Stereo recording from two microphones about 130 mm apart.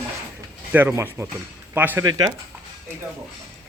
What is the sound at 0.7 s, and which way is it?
Speech, 15° right (ahead or behind).